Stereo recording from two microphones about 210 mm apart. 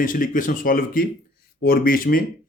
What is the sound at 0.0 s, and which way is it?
Speech, 40° left (ahead or behind).